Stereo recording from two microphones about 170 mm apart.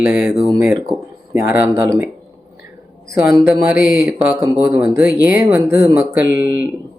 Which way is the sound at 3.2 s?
15° right (ahead or behind).